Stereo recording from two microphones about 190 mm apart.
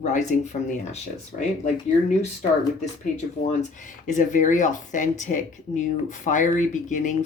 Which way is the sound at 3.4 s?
40° left (ahead or behind).